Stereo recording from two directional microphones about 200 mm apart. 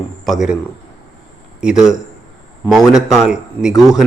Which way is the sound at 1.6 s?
5° right (ahead or behind).